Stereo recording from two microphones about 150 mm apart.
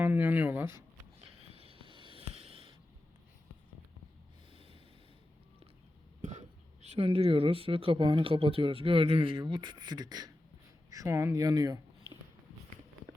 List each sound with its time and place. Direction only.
0.0 s speech: 10° right (ahead or behind)
1.2 s a sound: 40° right (ahead or behind)
4.5 s snort: 35° right (ahead or behind)
6.8 s speech: 40° right (ahead or behind); by 11.8 s 25° right (ahead or behind)